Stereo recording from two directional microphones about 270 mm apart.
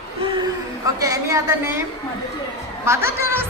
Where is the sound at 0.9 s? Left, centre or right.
Centre.